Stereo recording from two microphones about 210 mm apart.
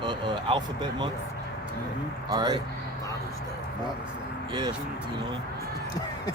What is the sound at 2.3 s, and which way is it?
Speech, 20° right (ahead or behind).